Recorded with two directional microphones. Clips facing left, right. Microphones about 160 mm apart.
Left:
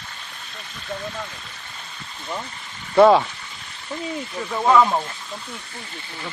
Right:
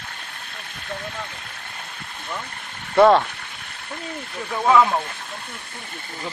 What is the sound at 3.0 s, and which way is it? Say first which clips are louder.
Speech: left 1 dB; centre (ahead or behind).